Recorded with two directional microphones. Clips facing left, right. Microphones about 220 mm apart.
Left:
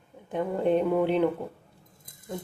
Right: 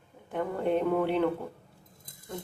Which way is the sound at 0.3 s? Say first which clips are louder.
Left 3 dB; 15° left (ahead or behind).